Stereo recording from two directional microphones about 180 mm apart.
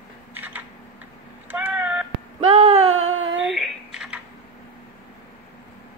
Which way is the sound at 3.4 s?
Centre (ahead or behind).